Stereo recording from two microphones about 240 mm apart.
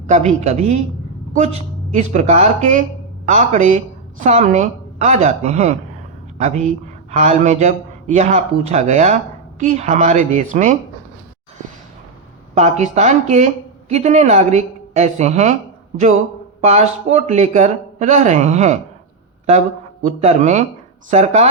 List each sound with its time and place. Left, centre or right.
0.1 s a woman's voice: right
7.1 s a woman's voice: right
12.5 s a woman's voice: right
16.6 s a woman's voice: right
20.2 s a woman's voice: right